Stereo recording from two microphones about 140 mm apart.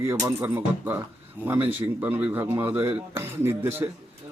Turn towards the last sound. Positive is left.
turn(degrees=-15)  # may be behind; listen again after turning